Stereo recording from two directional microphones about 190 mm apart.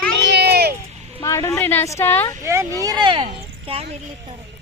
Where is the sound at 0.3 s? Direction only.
60° right (ahead or behind).